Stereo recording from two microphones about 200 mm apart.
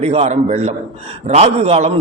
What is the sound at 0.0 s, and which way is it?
A man's voice, 30° right (ahead or behind).